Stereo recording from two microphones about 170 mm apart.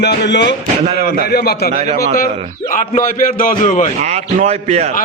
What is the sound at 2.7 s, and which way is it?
A man's voice, 50° left (ahead or behind).